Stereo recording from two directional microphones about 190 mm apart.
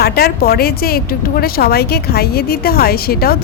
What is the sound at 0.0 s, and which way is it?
Speech, 55° left (ahead or behind).